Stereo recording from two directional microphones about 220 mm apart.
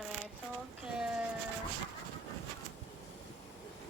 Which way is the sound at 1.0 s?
5° right (ahead or behind).